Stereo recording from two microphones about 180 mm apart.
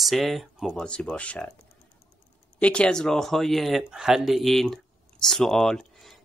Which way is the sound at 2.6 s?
5° left (ahead or behind).